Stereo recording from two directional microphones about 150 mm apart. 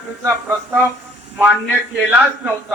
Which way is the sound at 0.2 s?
20° right (ahead or behind).